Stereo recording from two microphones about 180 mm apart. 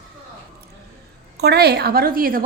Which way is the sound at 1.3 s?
65° right (ahead or behind).